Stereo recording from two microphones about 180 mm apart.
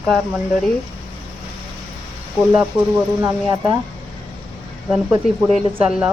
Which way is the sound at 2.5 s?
5° right (ahead or behind).